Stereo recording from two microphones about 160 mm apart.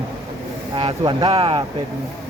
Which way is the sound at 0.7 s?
30° right (ahead or behind).